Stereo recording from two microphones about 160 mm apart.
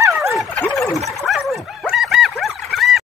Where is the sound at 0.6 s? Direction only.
Centre (ahead or behind).